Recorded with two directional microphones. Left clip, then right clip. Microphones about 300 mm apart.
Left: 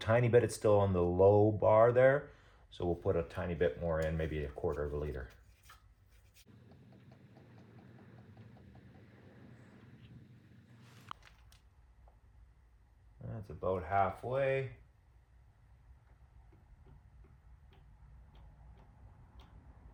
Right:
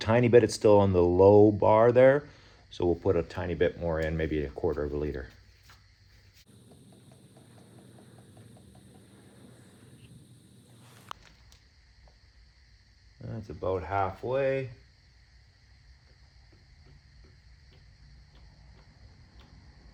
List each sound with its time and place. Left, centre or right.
0.0 s speech: right
13.6 s speech: right